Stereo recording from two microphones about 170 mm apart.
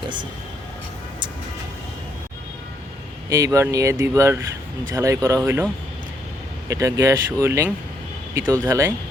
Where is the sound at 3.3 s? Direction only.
15° right (ahead or behind).